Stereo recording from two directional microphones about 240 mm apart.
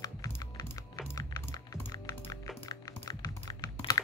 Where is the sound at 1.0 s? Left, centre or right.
Centre.